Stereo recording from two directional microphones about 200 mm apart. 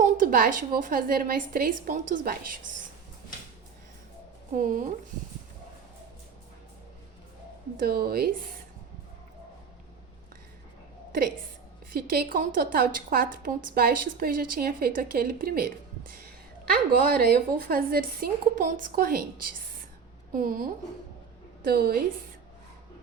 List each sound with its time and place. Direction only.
0.0 s a woman's voice: 45° right (ahead or behind)
4.5 s a woman's voice: 40° right (ahead or behind)
7.8 s a woman's voice: 50° right (ahead or behind)
11.9 s a woman's voice: 50° right (ahead or behind)
17.1 s a woman's voice: 50° right (ahead or behind)